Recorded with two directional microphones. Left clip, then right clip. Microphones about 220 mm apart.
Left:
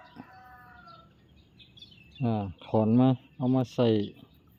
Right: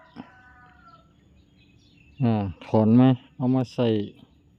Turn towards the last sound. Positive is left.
turn(degrees=-10)  # may be behind; listen again after turning